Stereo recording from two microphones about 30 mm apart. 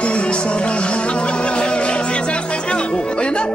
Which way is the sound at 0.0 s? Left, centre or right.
Left.